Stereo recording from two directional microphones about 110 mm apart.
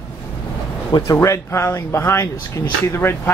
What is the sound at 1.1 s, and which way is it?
Speech, 25° left (ahead or behind).